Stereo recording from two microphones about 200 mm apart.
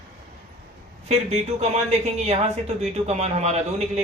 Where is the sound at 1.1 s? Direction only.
30° right (ahead or behind).